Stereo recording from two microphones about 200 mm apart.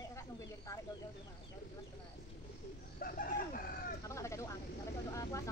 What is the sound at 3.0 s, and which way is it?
Chicken, 45° left (ahead or behind).